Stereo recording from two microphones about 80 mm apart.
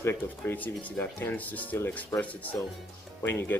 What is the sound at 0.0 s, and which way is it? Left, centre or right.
Speech, left.